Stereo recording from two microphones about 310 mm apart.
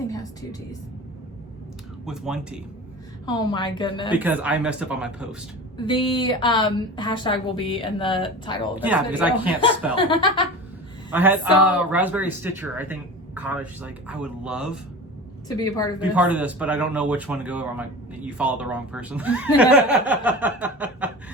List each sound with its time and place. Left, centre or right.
2.0 s speech: centre
3.2 s a woman's voice: centre
4.2 s speech: centre
5.7 s a woman's voice: centre
8.8 s speech: centre
9.6 s a woman's voice: centre
11.1 s speech: centre
15.4 s a woman's voice: centre
16.0 s speech: centre